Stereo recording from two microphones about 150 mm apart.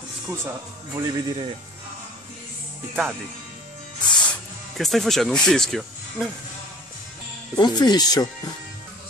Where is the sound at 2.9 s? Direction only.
5° right (ahead or behind).